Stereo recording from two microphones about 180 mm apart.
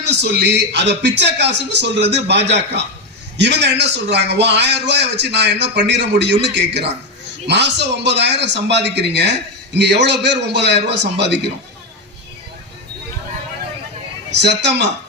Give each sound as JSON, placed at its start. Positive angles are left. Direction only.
{"t": 0.0, "sound": "a man's voice", "side_deg": -70}
{"t": 14.3, "sound": "a man's voice", "side_deg": -70}